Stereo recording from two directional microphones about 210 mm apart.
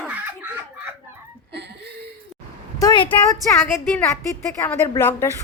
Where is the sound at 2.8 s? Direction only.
20° left (ahead or behind).